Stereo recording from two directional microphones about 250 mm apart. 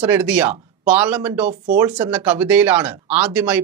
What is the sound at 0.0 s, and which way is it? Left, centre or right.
Speech, centre.